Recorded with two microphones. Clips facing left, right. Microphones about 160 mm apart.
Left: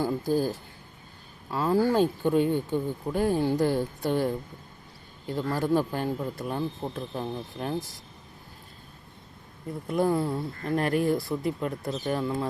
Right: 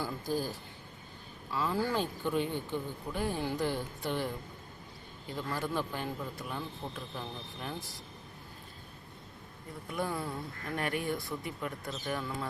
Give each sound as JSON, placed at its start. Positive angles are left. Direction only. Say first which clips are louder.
{"t": 0.0, "sound": "speech", "louder": "left 8 dB", "side_deg": 50}
{"t": 5.3, "sound": "speech", "louder": "left 9 dB", "side_deg": 40}
{"t": 9.9, "sound": "speech", "louder": "left 10 dB", "side_deg": 40}